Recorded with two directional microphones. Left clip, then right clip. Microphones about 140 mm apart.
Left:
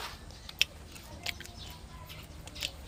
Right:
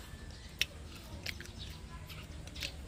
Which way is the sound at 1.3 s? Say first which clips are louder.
Left 5 dB; 5° right (ahead or behind).